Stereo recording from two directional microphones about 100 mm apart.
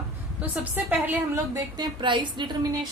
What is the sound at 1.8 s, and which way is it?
Speech, 55° right (ahead or behind).